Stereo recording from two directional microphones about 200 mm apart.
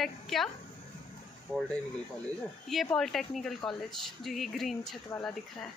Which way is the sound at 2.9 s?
Centre (ahead or behind).